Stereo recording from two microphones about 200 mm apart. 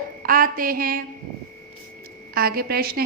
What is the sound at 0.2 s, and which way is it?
Speech, 45° right (ahead or behind).